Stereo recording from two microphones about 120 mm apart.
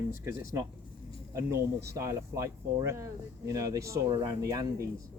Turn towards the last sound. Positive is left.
turn(degrees=-35)  # may be behind; listen again after turning